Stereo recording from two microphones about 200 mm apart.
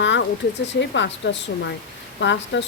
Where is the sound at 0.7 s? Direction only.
65° left (ahead or behind).